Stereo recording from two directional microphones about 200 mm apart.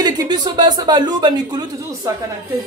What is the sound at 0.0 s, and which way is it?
Speech, 20° right (ahead or behind).